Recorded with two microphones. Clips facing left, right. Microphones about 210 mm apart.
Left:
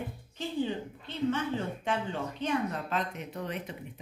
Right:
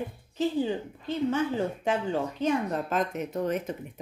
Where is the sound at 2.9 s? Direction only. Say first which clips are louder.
Right 6 dB; 45° right (ahead or behind).